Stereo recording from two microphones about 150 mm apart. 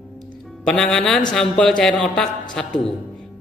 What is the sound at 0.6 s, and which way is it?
A man's voice, 5° left (ahead or behind).